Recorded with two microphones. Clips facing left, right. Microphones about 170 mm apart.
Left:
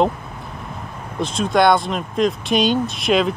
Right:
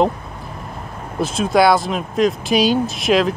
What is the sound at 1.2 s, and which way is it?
Speech, 5° right (ahead or behind).